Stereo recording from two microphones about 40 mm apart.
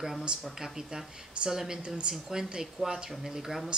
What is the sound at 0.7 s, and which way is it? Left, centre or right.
Speech, centre.